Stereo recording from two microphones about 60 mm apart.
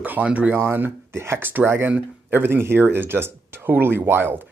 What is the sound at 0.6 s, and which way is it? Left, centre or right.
Speech, right.